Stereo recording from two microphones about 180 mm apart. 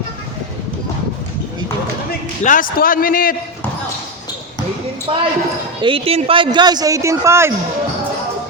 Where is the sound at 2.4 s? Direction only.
45° left (ahead or behind).